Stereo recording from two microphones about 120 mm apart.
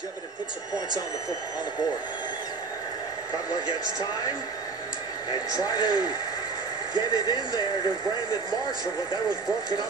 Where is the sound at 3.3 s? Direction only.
30° left (ahead or behind).